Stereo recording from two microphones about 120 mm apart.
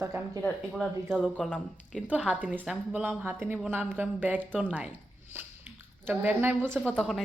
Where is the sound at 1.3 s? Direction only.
10° left (ahead or behind).